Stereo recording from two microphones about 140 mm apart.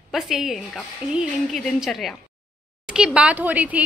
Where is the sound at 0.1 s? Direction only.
Centre (ahead or behind).